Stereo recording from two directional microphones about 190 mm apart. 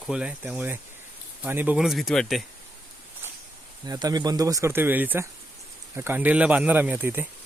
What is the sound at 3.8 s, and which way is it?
Speech, 20° right (ahead or behind).